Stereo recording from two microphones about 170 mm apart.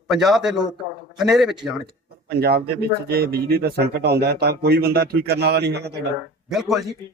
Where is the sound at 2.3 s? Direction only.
65° right (ahead or behind).